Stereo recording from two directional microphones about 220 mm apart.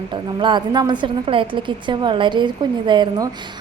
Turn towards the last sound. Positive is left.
turn(degrees=-20)  # may be behind; listen again after turning